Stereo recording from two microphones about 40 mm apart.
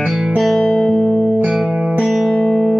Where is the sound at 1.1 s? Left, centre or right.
Left.